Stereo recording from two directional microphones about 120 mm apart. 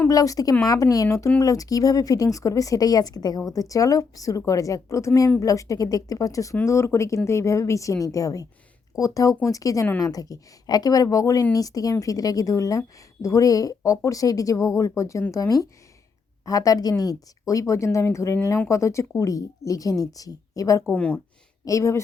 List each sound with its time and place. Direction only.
0.1 s a woman's voice: 30° left (ahead or behind)
20.9 s a woman's voice: 10° left (ahead or behind)
21.6 s speech: 25° left (ahead or behind)